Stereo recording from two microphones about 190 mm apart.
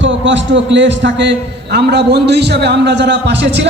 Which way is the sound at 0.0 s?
75° right (ahead or behind).